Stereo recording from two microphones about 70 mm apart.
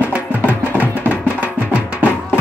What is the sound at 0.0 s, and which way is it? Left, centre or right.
Music, right.